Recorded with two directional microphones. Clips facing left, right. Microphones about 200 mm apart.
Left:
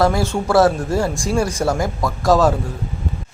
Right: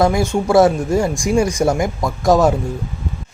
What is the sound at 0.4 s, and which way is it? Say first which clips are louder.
Speech: right 2 dB; 20° right (ahead or behind).